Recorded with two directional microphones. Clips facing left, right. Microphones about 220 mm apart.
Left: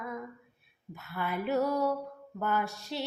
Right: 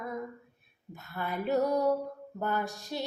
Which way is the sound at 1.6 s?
15° right (ahead or behind).